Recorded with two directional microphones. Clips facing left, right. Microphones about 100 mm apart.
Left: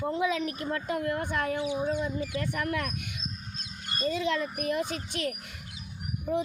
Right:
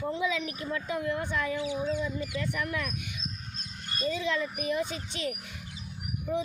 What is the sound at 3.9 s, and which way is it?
Speech, 45° left (ahead or behind).